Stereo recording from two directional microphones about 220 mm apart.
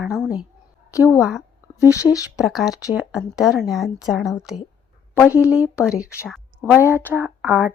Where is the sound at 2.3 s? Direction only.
Centre (ahead or behind).